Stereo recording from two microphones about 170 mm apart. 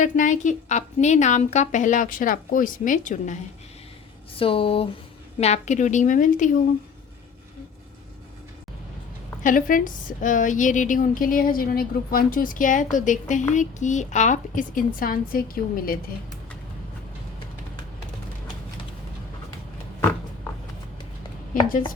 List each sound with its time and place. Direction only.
0.0 s a woman's voice: 45° left (ahead or behind)
4.4 s a woman's voice: 30° left (ahead or behind); by 6.6 s 50° left (ahead or behind)
9.4 s a woman's voice: 50° left (ahead or behind)